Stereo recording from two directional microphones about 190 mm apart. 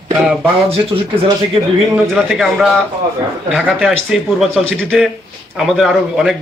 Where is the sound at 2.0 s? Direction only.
5° right (ahead or behind).